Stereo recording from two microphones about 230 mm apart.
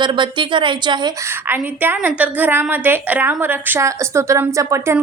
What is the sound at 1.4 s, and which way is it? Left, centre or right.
A woman's voice, centre.